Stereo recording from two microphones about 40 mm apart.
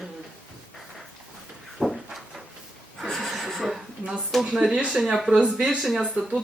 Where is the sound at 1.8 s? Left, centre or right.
Centre.